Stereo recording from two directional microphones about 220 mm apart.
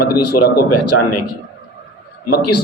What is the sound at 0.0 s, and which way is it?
Speech, 45° left (ahead or behind).